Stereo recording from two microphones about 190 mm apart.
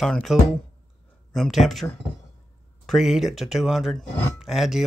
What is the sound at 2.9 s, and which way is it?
Speech, centre (ahead or behind).